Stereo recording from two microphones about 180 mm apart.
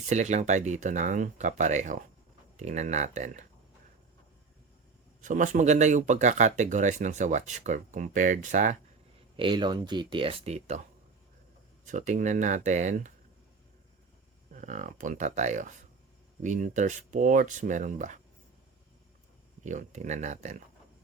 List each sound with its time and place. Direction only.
0.1 s speech: 40° right (ahead or behind)
5.2 s speech: 45° right (ahead or behind)
9.3 s speech: 25° right (ahead or behind)
11.9 s speech: 45° right (ahead or behind)
14.5 s speech: 45° right (ahead or behind)
19.6 s speech: 40° right (ahead or behind)